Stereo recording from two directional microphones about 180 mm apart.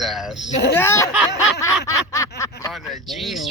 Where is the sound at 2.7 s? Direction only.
Centre (ahead or behind).